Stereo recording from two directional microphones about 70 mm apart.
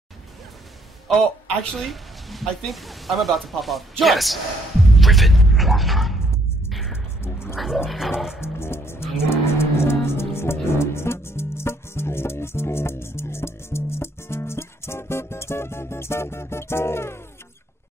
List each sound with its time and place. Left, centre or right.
1.8 s speech: centre
6.7 s music: centre
7.5 s speech: centre
8.4 s music: left